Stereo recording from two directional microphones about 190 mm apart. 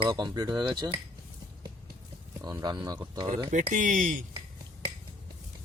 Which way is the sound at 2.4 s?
20° right (ahead or behind).